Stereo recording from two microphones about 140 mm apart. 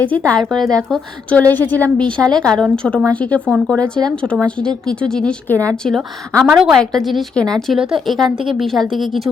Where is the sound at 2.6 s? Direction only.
5° left (ahead or behind).